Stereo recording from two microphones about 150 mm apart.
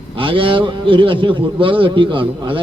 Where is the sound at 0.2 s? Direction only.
35° right (ahead or behind).